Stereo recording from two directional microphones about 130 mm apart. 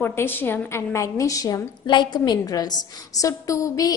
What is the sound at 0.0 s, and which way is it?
A woman's voice, 15° left (ahead or behind).